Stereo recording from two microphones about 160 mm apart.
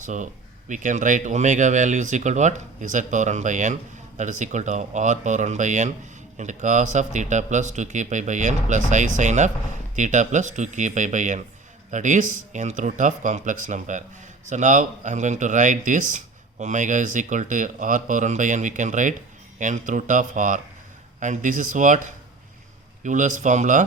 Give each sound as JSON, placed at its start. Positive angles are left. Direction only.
{"t": 0.0, "sound": "speech", "side_deg": -50}
{"t": 23.0, "sound": "speech", "side_deg": -50}